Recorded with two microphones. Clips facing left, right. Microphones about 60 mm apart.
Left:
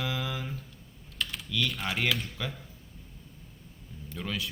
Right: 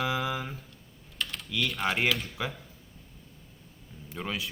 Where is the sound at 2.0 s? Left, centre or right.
Centre.